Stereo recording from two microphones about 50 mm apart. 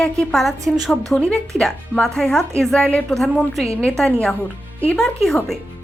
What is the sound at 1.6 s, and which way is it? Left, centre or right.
Speech, centre.